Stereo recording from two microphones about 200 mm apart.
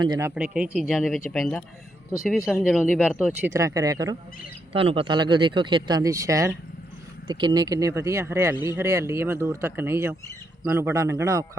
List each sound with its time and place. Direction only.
0.0 s speech: 15° right (ahead or behind)
4.7 s speech: 30° right (ahead or behind)